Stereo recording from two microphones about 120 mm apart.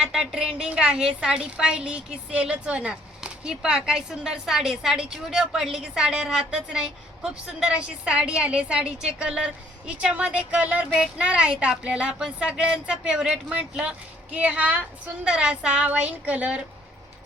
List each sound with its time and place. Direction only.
0.0 s a woman's voice: 5° right (ahead or behind)